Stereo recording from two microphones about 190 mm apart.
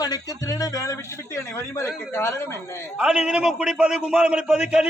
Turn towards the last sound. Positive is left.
turn(degrees=-5)  # may be behind; listen again after turning